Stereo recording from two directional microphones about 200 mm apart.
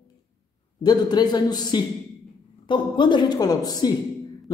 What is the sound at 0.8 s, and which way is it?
A man's voice, 20° left (ahead or behind).